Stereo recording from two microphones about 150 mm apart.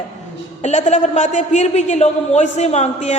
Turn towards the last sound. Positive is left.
turn(degrees=50)  # may be behind; listen again after turning